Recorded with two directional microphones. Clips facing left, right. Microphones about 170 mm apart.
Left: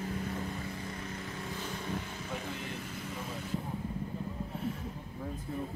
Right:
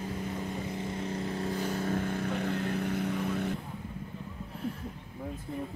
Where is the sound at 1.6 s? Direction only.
50° right (ahead or behind); by 3.5 s 65° right (ahead or behind).